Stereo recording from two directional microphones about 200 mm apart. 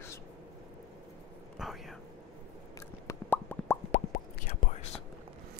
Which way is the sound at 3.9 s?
45° left (ahead or behind).